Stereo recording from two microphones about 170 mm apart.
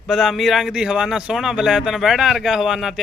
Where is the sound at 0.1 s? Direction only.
Centre (ahead or behind).